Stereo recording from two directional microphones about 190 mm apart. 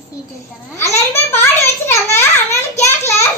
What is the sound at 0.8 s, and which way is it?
A child's voice, 15° left (ahead or behind).